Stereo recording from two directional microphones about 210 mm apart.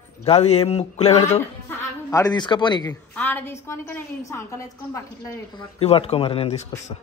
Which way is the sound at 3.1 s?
10° left (ahead or behind).